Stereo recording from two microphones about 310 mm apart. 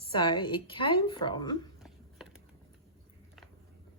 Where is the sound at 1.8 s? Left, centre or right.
Centre.